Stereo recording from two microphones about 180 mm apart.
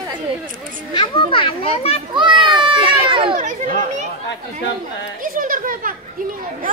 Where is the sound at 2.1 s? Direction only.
25° right (ahead or behind).